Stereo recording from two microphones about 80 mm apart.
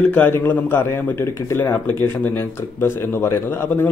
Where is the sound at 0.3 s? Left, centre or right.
Left.